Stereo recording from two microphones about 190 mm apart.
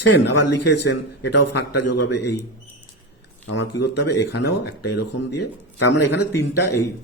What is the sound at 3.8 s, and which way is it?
A man's voice, 65° left (ahead or behind).